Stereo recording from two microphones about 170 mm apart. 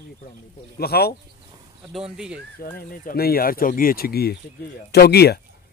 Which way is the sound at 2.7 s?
60° left (ahead or behind).